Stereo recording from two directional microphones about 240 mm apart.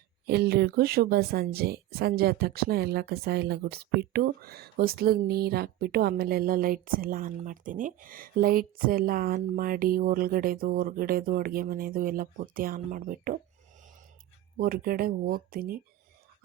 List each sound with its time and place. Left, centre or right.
0.3 s a woman's voice: right
14.6 s a woman's voice: right